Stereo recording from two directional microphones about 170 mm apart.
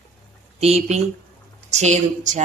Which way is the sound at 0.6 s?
40° right (ahead or behind).